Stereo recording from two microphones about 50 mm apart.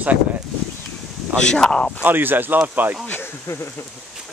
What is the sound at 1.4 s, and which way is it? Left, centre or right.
Speech, centre.